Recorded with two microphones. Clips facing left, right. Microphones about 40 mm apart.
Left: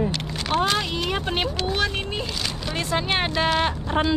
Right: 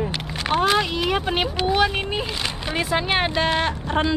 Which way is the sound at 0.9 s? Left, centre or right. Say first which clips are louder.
Right 3 dB; centre.